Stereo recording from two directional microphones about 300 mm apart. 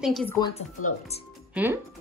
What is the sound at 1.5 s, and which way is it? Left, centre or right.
Speech, centre.